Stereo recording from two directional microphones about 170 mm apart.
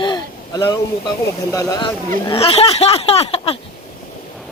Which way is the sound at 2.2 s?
35° left (ahead or behind).